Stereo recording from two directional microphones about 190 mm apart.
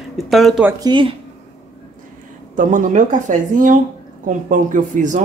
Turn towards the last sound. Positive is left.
turn(degrees=-45)  # may be behind; listen again after turning